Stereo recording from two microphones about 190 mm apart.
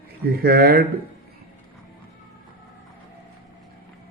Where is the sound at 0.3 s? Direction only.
55° right (ahead or behind).